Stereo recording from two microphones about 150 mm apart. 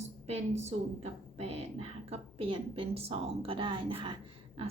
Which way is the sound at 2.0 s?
40° right (ahead or behind).